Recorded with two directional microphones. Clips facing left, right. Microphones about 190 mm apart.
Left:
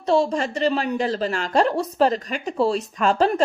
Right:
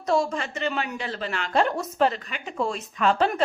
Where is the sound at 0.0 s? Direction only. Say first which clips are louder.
Left 4 dB; 30° left (ahead or behind).